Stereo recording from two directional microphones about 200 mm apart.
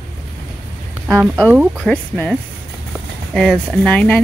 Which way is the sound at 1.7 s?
5° left (ahead or behind).